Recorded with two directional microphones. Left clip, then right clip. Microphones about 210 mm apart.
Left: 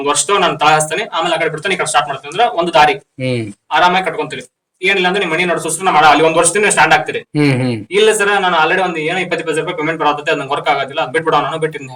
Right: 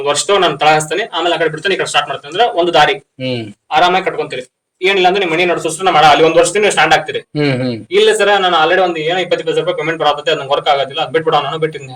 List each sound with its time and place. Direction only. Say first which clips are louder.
0.0 s a man's voice: right 1 dB; 5° left (ahead or behind)
7.3 s a man's voice: left 1 dB; 40° left (ahead or behind)
7.9 s speech: right 2 dB; 5° left (ahead or behind)